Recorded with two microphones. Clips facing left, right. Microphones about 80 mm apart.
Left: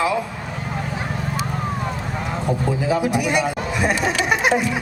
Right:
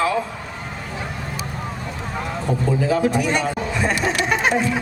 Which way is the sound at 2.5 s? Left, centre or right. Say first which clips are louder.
Right 1 dB; centre.